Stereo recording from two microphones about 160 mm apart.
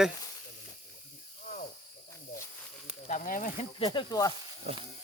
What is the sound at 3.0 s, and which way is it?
Speech, 55° left (ahead or behind).